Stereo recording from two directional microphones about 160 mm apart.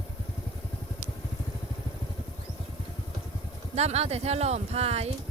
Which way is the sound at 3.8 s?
40° right (ahead or behind).